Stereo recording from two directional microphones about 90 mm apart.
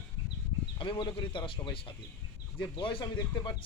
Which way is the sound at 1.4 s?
75° left (ahead or behind).